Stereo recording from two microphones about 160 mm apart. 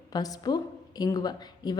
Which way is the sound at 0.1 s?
25° left (ahead or behind).